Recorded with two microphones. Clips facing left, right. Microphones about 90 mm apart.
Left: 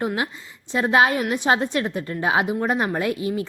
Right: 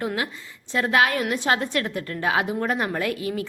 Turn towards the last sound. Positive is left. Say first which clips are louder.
# left 2 dB
turn(degrees=25)  # may be behind; listen again after turning